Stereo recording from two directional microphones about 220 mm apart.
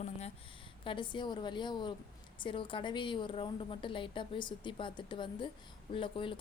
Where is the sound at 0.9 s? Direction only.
20° left (ahead or behind).